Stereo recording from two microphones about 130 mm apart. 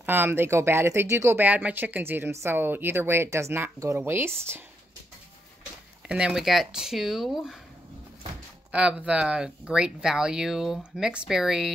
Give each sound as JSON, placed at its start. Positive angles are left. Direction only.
{"t": 0.0, "sound": "speech", "side_deg": -15}
{"t": 6.0, "sound": "speech", "side_deg": -5}
{"t": 8.7, "sound": "speech", "side_deg": -10}